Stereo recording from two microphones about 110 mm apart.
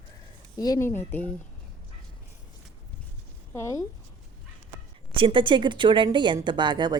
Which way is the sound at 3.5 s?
25° left (ahead or behind).